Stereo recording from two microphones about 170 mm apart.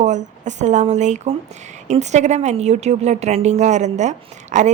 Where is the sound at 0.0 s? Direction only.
45° right (ahead or behind).